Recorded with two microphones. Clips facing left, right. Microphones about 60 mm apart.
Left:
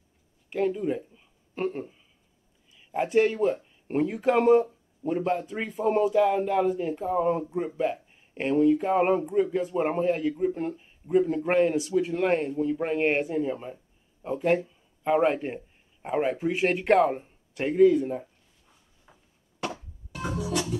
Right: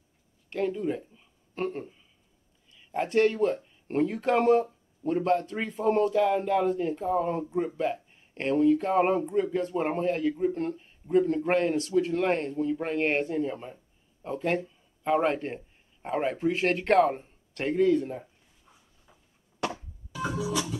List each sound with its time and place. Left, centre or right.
0.5 s speech: centre
20.4 s music: left